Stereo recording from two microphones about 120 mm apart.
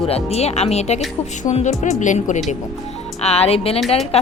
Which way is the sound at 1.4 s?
80° left.